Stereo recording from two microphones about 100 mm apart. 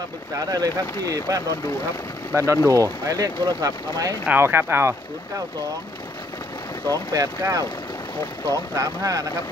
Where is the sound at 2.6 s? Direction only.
35° right (ahead or behind).